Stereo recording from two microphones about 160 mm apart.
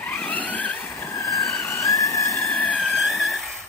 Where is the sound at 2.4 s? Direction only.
10° left (ahead or behind).